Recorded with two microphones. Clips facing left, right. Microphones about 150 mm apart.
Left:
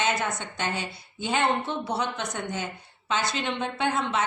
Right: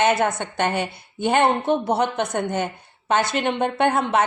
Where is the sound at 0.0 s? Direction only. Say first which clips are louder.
Right 8 dB; 60° right (ahead or behind).